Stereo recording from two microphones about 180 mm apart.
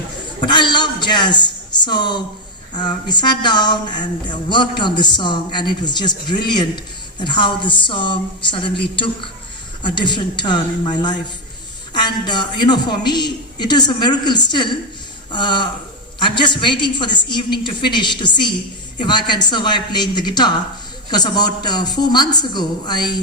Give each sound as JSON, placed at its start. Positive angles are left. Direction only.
{"t": 0.4, "sound": "speech", "side_deg": 25}